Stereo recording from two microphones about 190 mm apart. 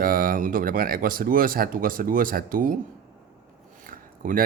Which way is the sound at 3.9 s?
45° right (ahead or behind).